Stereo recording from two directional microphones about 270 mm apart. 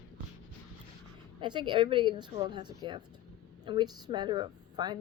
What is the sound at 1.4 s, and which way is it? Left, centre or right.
A woman's voice, centre.